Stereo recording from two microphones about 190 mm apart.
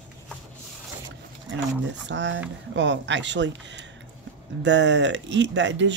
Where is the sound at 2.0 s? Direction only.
70° right (ahead or behind).